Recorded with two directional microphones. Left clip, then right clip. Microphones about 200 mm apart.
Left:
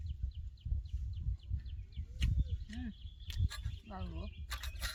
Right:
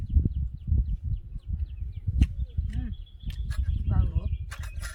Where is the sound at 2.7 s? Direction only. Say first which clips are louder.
Right 2 dB; 15° left (ahead or behind).